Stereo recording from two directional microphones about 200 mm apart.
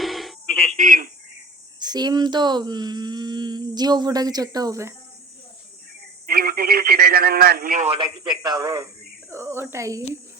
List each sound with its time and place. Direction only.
0.0 s music: centre (ahead or behind)
0.8 s speech: 40° right (ahead or behind)
1.8 s speech: 20° right (ahead or behind)
6.2 s telephone: 50° right (ahead or behind)
7.9 s speech: 25° right (ahead or behind)